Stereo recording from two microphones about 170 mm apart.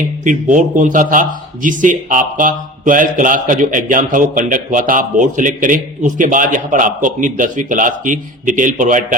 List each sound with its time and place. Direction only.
0.0 s speech: 50° right (ahead or behind)